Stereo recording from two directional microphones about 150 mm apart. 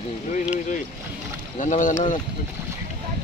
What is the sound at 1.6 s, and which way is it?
Speech, 55° left (ahead or behind).